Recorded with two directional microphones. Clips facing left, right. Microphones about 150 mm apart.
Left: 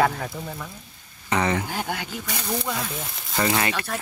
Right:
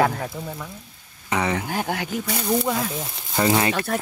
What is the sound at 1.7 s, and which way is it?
Speech, 45° right (ahead or behind).